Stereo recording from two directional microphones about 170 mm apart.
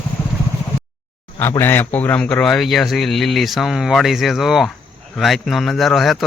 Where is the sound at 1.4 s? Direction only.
15° left (ahead or behind).